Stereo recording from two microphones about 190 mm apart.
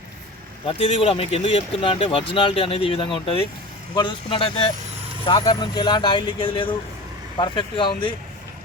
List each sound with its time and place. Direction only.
0.7 s speech: 30° left (ahead or behind)